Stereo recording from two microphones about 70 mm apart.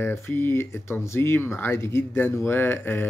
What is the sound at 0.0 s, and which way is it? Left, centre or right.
Speech, left.